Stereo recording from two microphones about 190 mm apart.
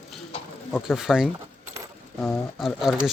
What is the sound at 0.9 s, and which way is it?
Speech, centre (ahead or behind).